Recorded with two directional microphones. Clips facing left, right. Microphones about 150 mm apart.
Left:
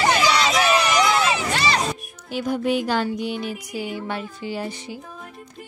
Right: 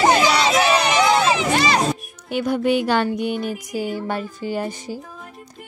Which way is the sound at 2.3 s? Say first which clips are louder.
Right 3 dB; 65° right (ahead or behind).